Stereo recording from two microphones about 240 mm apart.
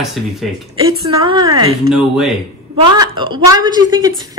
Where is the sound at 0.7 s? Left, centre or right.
Centre.